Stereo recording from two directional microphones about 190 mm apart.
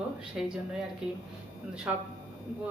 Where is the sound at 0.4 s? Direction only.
5° right (ahead or behind).